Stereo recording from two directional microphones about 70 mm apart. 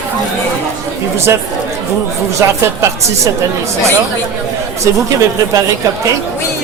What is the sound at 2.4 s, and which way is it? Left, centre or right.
Music, right.